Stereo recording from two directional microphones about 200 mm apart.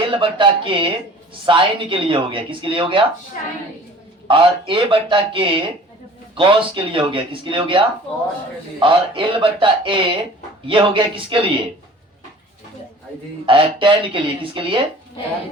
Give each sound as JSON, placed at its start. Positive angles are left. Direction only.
{"t": 0.1, "sound": "speech", "side_deg": -25}
{"t": 4.3, "sound": "speech", "side_deg": -25}
{"t": 13.4, "sound": "speech", "side_deg": -25}